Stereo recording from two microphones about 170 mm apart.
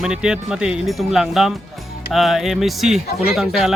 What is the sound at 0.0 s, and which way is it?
Speech, 5° right (ahead or behind).